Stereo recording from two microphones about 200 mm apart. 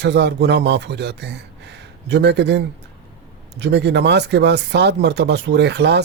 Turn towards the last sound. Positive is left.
turn(degrees=-55)  # may be behind; listen again after turning